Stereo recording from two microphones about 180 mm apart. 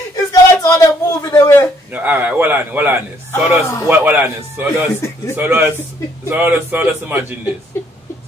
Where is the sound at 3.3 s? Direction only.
15° left (ahead or behind).